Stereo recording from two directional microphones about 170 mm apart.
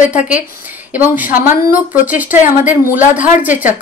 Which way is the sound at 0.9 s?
10° right (ahead or behind).